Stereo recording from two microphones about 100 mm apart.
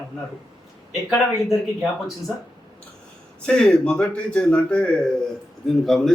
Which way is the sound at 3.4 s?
10° left (ahead or behind).